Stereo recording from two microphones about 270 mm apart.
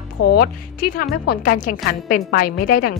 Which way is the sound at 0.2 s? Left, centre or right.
Left.